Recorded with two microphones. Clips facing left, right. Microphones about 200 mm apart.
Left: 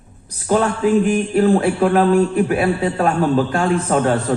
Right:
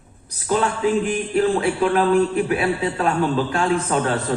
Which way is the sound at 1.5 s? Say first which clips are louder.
Left 4 dB; 50° left (ahead or behind).